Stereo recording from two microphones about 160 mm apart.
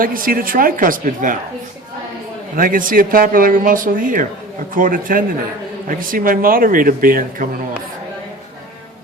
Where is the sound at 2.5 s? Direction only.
60° right (ahead or behind).